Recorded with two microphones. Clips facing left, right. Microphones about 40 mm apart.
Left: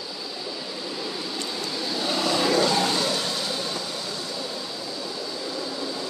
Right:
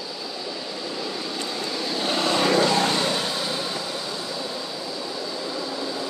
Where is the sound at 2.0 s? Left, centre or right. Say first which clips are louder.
Right 2 dB; right.